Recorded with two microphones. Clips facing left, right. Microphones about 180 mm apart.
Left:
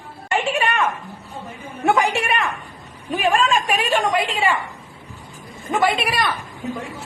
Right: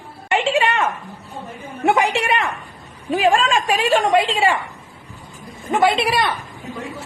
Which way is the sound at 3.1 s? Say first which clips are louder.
Right 3 dB; 90° right.